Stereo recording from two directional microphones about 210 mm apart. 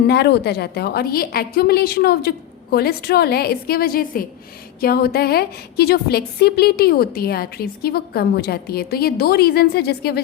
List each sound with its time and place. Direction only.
0.1 s a woman's voice: 50° left (ahead or behind)